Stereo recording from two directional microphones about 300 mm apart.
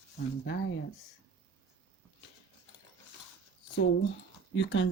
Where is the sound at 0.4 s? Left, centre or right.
Left.